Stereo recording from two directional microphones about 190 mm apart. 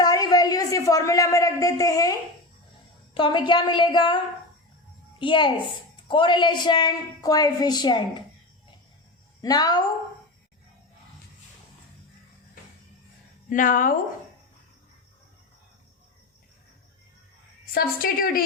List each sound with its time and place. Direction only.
0.0 s a sound: 20° left (ahead or behind)
3.2 s a woman's voice: 25° left (ahead or behind)
5.2 s a woman's voice: 25° left (ahead or behind)
9.4 s a woman's voice: 20° left (ahead or behind)
13.5 s a woman's voice: 45° left (ahead or behind)
17.7 s a woman's voice: 50° left (ahead or behind)